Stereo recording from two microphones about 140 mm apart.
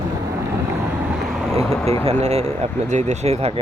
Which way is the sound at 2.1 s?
50° right (ahead or behind).